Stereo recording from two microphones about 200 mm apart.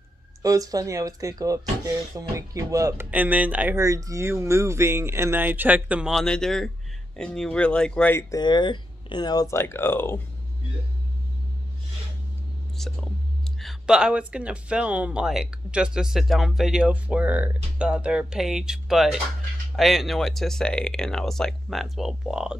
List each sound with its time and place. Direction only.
0.4 s speech: 15° right (ahead or behind); by 10.2 s 10° left (ahead or behind)
12.8 s speech: centre (ahead or behind)